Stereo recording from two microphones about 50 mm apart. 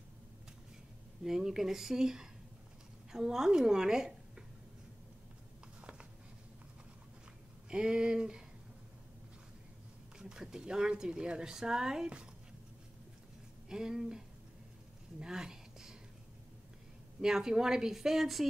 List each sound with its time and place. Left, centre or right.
1.2 s a woman's voice: centre
5.8 s a sound: right
7.7 s speech: centre
10.1 s speech: centre
13.7 s speech: centre
15.1 s a sound: centre
17.2 s speech: centre